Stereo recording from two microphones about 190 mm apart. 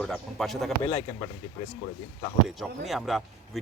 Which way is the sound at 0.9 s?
20° left (ahead or behind).